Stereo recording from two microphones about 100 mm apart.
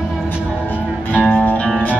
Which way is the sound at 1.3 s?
10° left (ahead or behind).